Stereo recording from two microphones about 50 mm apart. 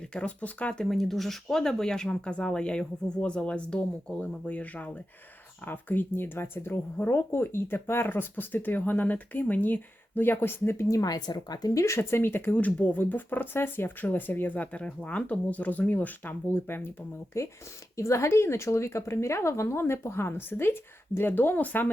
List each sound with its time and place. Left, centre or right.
0.1 s speech: left
0.9 s speech: centre; by 4.9 s left
5.6 s speech: left
11.9 s speech: left
12.5 s speech: left
16.5 s speech: left
17.3 s speech: left